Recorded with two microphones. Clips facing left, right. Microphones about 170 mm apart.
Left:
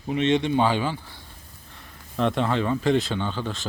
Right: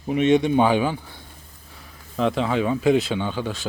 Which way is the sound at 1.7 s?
5° right (ahead or behind).